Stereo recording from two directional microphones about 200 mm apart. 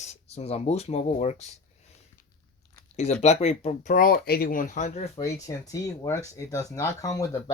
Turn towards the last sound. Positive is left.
turn(degrees=15)  # may be behind; listen again after turning